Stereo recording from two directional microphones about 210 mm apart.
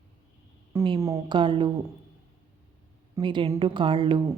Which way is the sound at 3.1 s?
25° right (ahead or behind).